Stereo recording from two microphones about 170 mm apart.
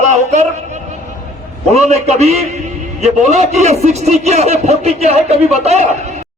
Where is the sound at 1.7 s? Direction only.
40° right (ahead or behind).